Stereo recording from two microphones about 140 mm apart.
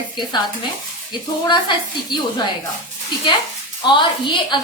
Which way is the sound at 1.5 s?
35° left (ahead or behind).